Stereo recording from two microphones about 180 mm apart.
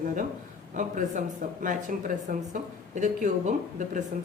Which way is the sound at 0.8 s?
45° right (ahead or behind).